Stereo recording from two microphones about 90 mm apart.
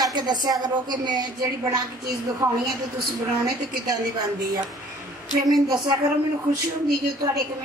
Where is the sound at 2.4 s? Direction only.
40° right (ahead or behind).